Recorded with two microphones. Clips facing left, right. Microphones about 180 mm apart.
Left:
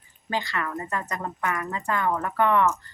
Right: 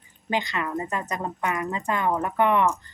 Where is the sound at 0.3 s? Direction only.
20° right (ahead or behind).